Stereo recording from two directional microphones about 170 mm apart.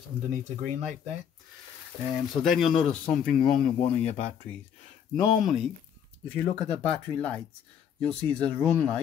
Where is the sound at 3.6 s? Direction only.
35° left (ahead or behind).